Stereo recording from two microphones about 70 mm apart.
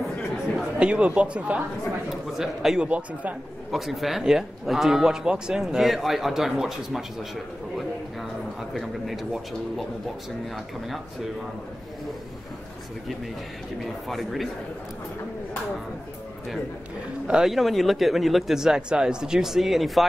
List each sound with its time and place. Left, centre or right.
0.7 s speech: centre
2.0 s speech: centre
13.7 s speech: centre
17.3 s speech: centre